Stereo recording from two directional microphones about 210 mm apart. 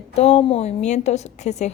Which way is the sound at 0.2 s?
30° left (ahead or behind).